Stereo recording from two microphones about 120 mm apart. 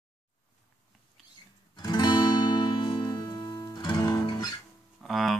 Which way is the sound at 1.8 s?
35° left (ahead or behind).